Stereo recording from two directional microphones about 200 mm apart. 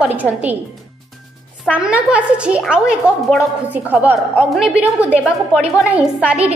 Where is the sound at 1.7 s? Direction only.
5° right (ahead or behind).